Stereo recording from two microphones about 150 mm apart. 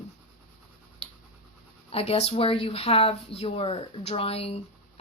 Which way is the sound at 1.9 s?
40° left (ahead or behind).